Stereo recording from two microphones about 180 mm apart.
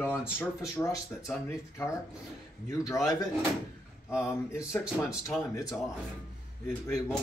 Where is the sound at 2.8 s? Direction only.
15° left (ahead or behind).